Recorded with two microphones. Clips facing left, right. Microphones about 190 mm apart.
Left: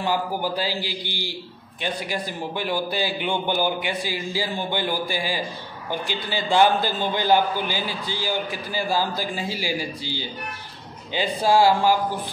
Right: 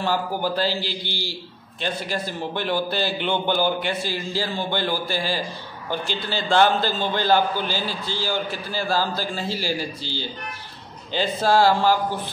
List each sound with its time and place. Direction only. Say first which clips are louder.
0.0 s a man's voice: right 1 dB; 15° left (ahead or behind)